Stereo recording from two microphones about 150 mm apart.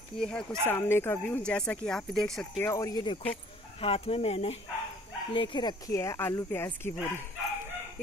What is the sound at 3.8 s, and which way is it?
Speech, 40° left (ahead or behind).